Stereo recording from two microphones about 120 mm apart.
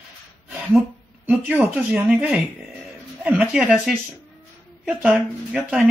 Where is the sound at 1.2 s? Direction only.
15° right (ahead or behind).